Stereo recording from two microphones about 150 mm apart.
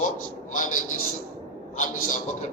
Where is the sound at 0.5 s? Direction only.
60° left (ahead or behind).